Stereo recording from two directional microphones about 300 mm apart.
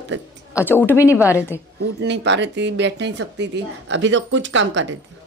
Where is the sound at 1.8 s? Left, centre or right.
Right.